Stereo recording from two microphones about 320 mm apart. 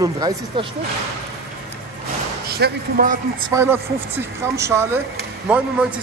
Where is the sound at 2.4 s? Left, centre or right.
Right.